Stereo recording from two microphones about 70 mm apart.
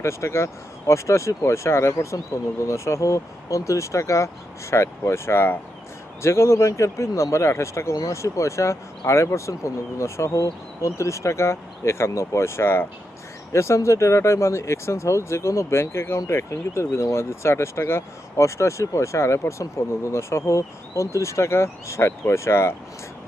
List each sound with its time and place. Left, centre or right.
0.0 s speech: left